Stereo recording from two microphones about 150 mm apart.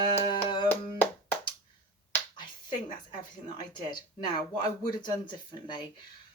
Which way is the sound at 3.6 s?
30° left (ahead or behind).